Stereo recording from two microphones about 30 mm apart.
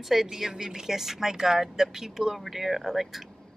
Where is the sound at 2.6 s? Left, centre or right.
Centre.